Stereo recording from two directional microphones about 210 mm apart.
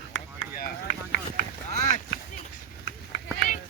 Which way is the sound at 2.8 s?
55° left (ahead or behind).